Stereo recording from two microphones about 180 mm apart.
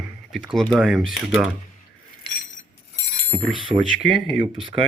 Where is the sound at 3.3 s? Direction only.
Centre (ahead or behind).